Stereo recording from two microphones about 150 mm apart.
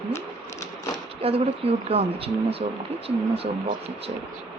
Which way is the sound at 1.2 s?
40° right (ahead or behind).